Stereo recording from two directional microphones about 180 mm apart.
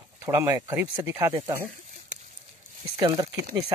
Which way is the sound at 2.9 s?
20° right (ahead or behind).